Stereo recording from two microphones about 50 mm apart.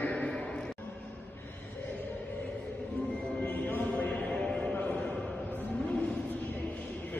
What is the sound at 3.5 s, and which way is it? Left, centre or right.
Music, left.